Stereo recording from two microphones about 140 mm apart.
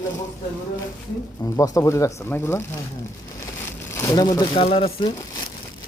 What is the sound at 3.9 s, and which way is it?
Speech, 20° left (ahead or behind).